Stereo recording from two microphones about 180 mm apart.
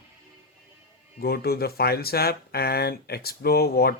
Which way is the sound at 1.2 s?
60° left (ahead or behind).